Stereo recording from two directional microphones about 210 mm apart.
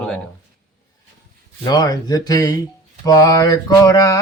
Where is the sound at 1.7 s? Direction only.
20° left (ahead or behind).